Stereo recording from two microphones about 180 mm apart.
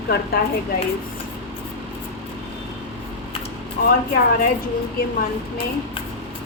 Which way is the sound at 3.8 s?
55° left (ahead or behind).